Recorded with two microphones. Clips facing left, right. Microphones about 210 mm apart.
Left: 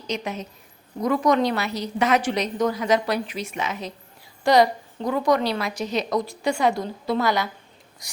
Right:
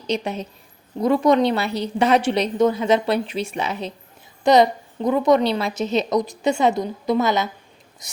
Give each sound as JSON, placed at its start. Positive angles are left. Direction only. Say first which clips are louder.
{"t": 0.1, "sound": "a woman's voice", "louder": "right 5 dB", "side_deg": -30}
{"t": 4.4, "sound": "a woman's voice", "louder": "right 3 dB", "side_deg": -20}